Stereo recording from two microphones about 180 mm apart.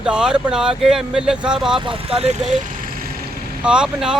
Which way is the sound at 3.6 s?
5° right (ahead or behind).